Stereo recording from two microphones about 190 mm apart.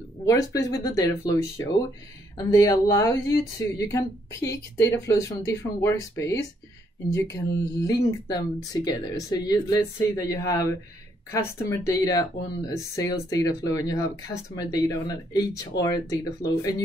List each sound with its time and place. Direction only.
0.2 s speech: 20° left (ahead or behind)